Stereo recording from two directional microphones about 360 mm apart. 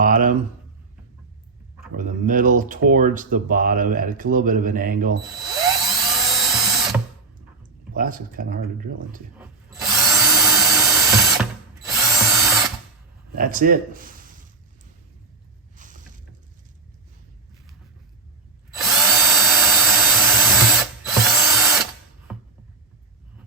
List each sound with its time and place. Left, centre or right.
0.0 s speech: right
2.0 s speech: right
5.2 s drill: centre
7.9 s speech: right
9.6 s drill: centre
13.3 s speech: right
15.7 s rowboat: right
18.7 s drill: centre
22.3 s a sound: centre